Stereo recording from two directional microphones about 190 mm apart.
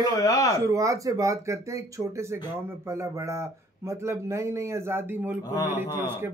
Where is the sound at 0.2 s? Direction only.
15° left (ahead or behind).